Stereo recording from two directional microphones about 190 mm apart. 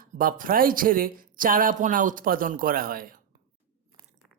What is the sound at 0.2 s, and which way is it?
Speech, 45° right (ahead or behind).